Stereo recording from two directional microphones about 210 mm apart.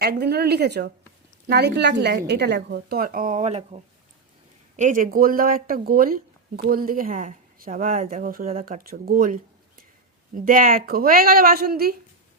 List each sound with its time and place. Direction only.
0.0 s a woman's voice: 50° right (ahead or behind); by 3.8 s 30° right (ahead or behind)
4.8 s a woman's voice: 40° right (ahead or behind)